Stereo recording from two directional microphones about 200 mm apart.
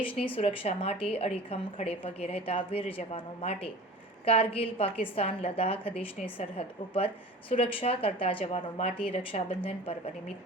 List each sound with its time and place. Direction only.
0.0 s a woman's voice: 25° left (ahead or behind)